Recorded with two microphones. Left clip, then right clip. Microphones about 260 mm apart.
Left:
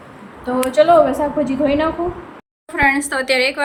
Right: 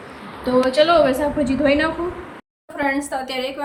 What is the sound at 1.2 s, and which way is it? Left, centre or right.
Speech, centre.